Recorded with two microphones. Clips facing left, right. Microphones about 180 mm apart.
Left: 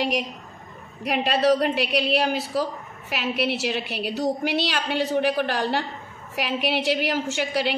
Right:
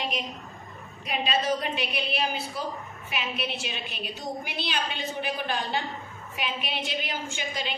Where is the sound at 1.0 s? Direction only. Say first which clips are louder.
Left 7 dB; 70° left (ahead or behind).